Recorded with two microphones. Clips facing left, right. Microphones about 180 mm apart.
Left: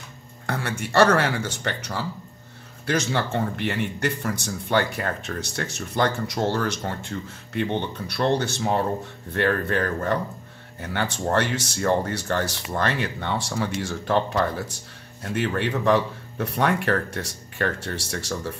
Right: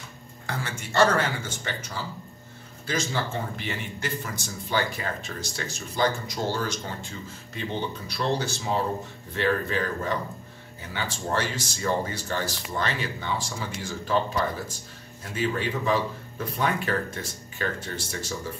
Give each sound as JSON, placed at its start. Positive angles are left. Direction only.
{"t": 0.5, "sound": "a man's voice", "side_deg": 60}